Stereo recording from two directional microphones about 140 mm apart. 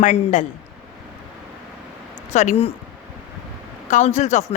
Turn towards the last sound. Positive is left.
turn(degrees=55)  # may be behind; listen again after turning